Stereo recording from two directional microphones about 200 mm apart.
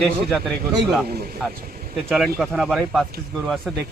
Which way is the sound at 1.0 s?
50° right (ahead or behind).